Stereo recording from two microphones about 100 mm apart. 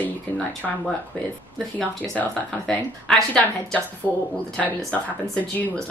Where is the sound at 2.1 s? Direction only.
10° left (ahead or behind).